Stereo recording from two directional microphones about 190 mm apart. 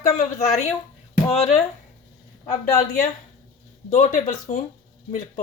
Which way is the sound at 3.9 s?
40° left (ahead or behind).